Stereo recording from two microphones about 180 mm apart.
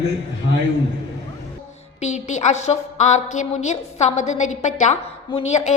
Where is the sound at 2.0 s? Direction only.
40° left (ahead or behind).